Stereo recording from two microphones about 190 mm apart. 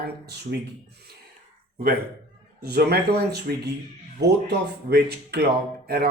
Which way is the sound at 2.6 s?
55° right (ahead or behind).